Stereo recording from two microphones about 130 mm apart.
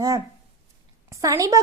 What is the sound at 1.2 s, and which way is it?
Speech, 25° right (ahead or behind).